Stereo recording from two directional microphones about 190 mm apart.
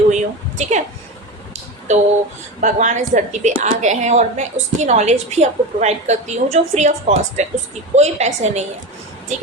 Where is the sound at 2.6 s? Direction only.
40° right (ahead or behind).